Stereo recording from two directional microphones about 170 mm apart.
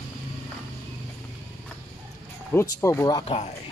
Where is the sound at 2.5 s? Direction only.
15° left (ahead or behind).